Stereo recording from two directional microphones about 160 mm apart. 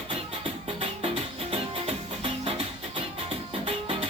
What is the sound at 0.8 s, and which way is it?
Music, 40° right (ahead or behind).